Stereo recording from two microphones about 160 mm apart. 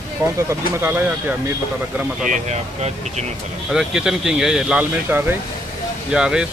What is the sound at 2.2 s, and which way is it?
Speech, 50° right (ahead or behind).